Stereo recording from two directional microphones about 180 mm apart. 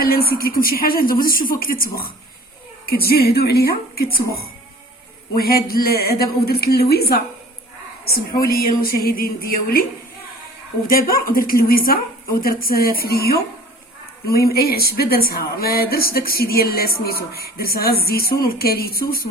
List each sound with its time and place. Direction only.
0.0 s a woman's voice: 55° left (ahead or behind)
10.8 s speech: 55° left (ahead or behind)